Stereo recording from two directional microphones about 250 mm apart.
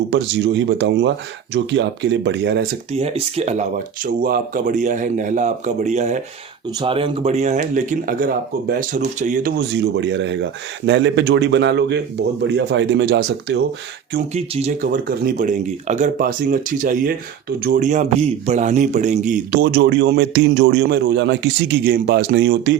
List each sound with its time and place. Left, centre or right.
0.1 s speech: right
2.9 s speech: right
14.3 s a man's voice: right